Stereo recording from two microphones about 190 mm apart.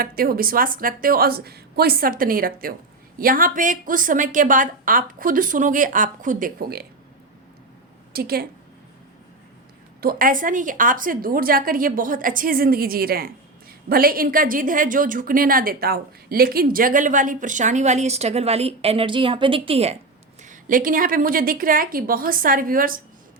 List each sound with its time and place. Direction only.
0.0 s a woman's voice: 50° right (ahead or behind)
8.1 s a woman's voice: 55° right (ahead or behind)
10.0 s a woman's voice: 50° right (ahead or behind); by 20.0 s 30° right (ahead or behind)
20.4 s a woman's voice: 45° right (ahead or behind)